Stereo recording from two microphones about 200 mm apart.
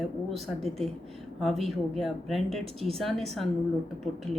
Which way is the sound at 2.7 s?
30° right (ahead or behind).